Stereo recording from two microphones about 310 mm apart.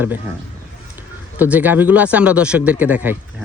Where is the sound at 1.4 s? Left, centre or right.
Centre.